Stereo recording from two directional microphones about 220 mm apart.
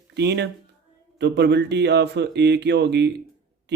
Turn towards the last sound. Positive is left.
turn(degrees=-50)  # may be behind; listen again after turning